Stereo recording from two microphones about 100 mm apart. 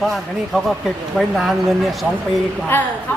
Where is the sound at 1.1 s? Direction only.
Centre (ahead or behind).